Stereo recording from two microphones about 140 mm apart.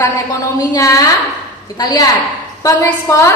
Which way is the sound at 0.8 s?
25° left (ahead or behind).